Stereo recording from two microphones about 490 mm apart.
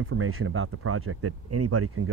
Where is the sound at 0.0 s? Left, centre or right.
Right.